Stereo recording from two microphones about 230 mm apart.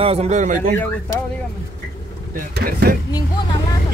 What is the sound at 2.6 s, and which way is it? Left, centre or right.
Speech, right.